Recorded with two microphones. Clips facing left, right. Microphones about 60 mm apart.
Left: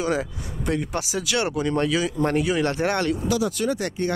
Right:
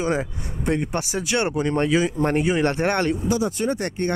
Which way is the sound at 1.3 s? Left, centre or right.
Right.